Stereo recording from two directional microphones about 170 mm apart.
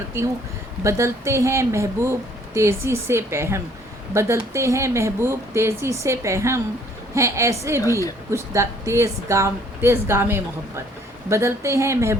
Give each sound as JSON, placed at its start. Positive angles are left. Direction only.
{"t": 0.9, "sound": "speech", "side_deg": -15}